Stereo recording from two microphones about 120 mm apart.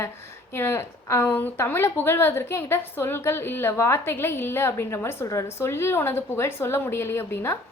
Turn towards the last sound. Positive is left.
turn(degrees=20)  # may be behind; listen again after turning